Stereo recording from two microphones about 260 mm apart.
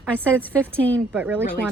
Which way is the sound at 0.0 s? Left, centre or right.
Centre.